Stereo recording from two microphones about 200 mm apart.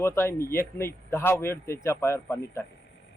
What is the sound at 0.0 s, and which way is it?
A man's voice, 10° left (ahead or behind).